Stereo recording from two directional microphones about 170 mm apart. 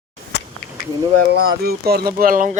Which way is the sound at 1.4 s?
70° right (ahead or behind).